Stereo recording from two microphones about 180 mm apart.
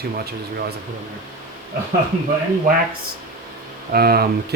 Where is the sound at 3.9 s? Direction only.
60° right (ahead or behind).